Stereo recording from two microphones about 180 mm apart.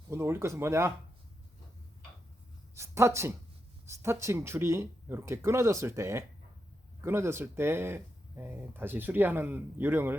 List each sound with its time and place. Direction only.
0.1 s speech: 15° right (ahead or behind)
2.7 s speech: 15° right (ahead or behind)